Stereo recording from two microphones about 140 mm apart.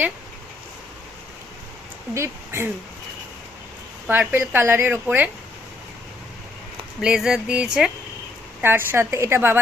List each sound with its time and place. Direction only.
2.1 s speech: 20° right (ahead or behind)
4.0 s speech: 15° right (ahead or behind)
7.0 s speech: 5° right (ahead or behind)